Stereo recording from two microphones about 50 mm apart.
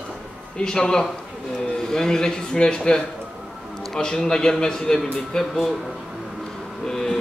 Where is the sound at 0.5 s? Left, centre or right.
Centre.